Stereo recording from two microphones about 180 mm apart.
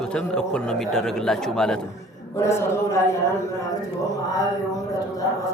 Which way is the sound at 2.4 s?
15° left (ahead or behind).